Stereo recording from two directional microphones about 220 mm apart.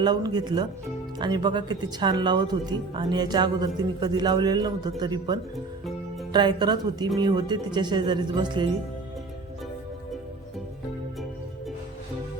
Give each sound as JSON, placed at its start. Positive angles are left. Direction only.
{"t": 0.0, "sound": "speech", "side_deg": -20}